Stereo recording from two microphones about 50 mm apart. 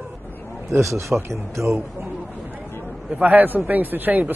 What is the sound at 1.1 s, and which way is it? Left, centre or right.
Speech, centre.